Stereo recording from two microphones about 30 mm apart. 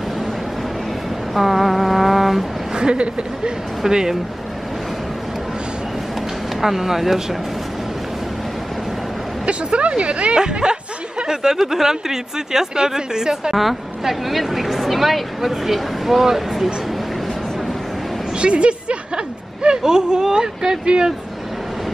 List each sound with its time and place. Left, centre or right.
1.3 s vehicle: centre
2.7 s speech: right
6.6 s speech: centre
9.5 s speech: right
10.3 s snicker: right
11.6 s speech: centre
13.6 s speech: centre
18.4 s a sound: right
19.1 s speech: right